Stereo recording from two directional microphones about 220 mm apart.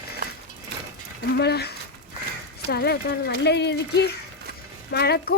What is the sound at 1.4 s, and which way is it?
Speech, 45° left (ahead or behind).